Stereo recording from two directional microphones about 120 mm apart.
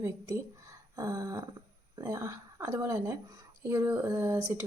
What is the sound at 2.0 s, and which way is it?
Speech, 30° right (ahead or behind).